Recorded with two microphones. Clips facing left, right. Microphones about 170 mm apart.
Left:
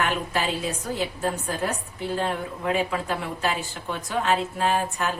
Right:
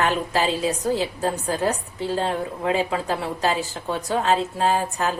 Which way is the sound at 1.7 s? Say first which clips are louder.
Right 5 dB; 30° right (ahead or behind).